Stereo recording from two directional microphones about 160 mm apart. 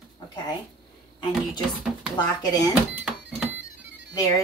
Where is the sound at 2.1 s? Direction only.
25° left (ahead or behind).